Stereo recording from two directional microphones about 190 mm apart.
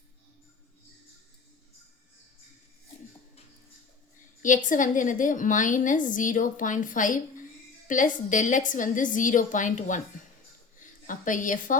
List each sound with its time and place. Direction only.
4.4 s a woman's voice: 45° left (ahead or behind)
11.0 s a woman's voice: 45° left (ahead or behind)